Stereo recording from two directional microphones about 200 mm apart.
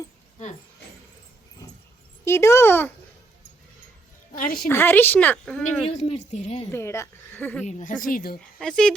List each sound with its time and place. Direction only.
2.2 s speech: 15° left (ahead or behind)
4.4 s a woman's voice: 45° left (ahead or behind)
4.7 s speech: 10° left (ahead or behind)
5.9 s a woman's voice: 35° left (ahead or behind)
6.7 s speech: 10° left (ahead or behind)
7.6 s a woman's voice: 35° left (ahead or behind)
8.5 s speech: 5° left (ahead or behind)